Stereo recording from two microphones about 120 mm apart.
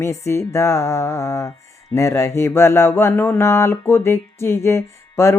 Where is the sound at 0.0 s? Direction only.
25° left (ahead or behind).